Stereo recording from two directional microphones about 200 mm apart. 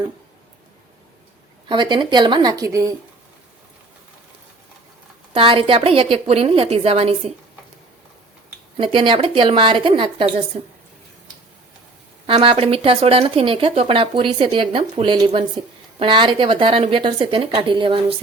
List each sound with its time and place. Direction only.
1.6 s speech: 25° right (ahead or behind)
5.3 s speech: 25° right (ahead or behind)
8.8 s a woman's voice: 25° right (ahead or behind)
12.2 s speech: 25° right (ahead or behind)